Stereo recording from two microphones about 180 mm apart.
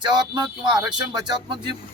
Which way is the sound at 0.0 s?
25° right (ahead or behind).